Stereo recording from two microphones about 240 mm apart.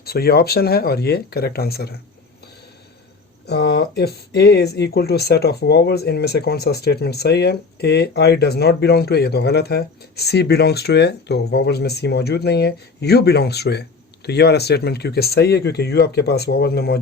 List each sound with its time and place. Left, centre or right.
0.0 s speech: left
3.4 s speech: left